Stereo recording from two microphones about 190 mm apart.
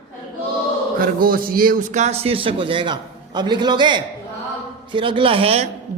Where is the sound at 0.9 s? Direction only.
50° right (ahead or behind); by 5.6 s 30° right (ahead or behind).